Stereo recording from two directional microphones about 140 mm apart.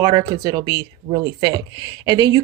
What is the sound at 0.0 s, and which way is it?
Speech, 25° right (ahead or behind).